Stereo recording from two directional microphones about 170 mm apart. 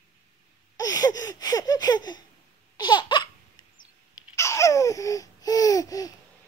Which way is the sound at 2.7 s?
25° left (ahead or behind).